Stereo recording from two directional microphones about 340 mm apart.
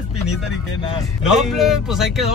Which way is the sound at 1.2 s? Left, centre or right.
Centre.